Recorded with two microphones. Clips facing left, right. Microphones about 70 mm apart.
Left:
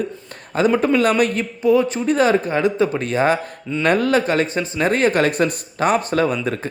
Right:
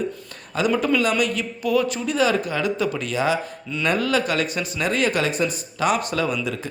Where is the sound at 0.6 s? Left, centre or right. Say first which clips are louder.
Left 4 dB; left.